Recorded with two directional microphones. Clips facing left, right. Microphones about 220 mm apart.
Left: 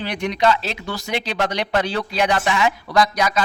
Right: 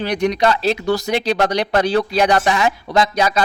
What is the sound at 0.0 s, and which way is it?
Speech, 40° right (ahead or behind).